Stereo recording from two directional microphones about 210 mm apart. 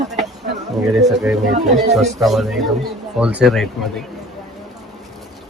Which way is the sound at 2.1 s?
Centre (ahead or behind).